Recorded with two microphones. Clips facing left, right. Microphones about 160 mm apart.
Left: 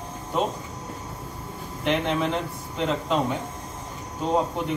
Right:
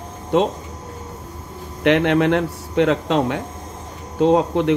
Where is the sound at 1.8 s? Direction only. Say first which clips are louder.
Right 9 dB; 70° right (ahead or behind).